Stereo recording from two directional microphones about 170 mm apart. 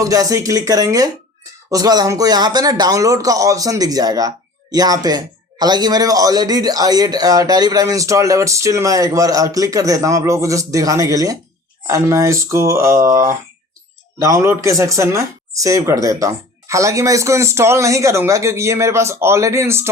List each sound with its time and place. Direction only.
0.0 s a man's voice: 20° right (ahead or behind)